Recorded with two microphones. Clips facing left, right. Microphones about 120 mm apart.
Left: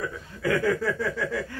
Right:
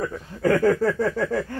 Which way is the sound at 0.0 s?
45° right (ahead or behind).